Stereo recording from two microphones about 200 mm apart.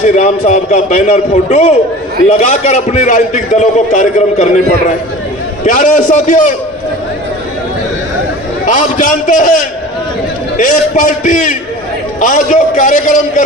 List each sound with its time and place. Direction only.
0.2 s a man's voice: 35° left (ahead or behind)
5.6 s a man's voice: 40° left (ahead or behind)
8.6 s a man's voice: 40° left (ahead or behind)